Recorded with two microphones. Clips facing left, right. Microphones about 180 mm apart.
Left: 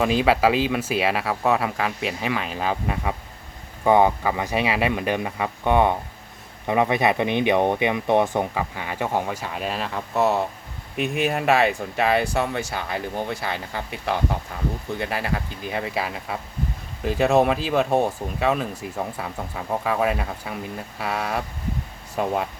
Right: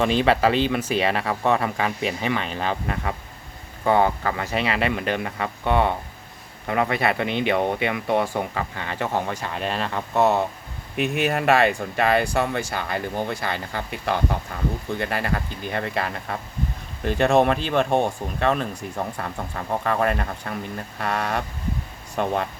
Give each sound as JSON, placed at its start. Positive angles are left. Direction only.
{"t": 0.0, "sound": "speech", "side_deg": 5}